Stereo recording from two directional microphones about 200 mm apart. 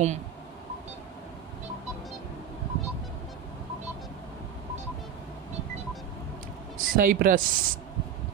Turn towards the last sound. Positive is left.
turn(degrees=-45)  # may be behind; listen again after turning